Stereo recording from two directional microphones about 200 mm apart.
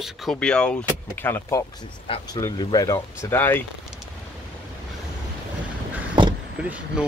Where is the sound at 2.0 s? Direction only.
25° left (ahead or behind); by 3.6 s 10° left (ahead or behind).